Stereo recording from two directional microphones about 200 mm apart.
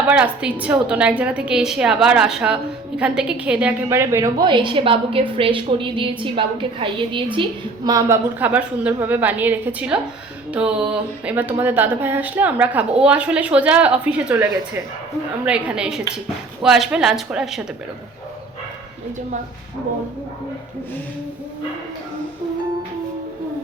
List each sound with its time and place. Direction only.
0.1 s a woman's voice: 5° right (ahead or behind)
15.4 s a woman's voice: 5° right (ahead or behind)